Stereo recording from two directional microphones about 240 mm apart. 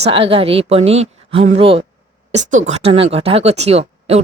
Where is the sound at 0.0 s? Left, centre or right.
Right.